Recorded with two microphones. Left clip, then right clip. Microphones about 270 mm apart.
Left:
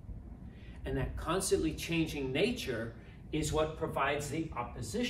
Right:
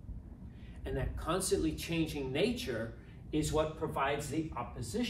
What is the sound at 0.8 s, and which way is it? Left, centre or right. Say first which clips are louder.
Speech: left 1 dB; centre.